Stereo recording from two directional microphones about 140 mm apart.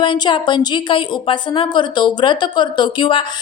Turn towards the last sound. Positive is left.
turn(degrees=35)  # may be behind; listen again after turning